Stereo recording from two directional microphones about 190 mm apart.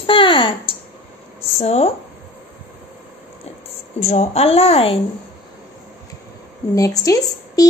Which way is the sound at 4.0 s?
35° left (ahead or behind).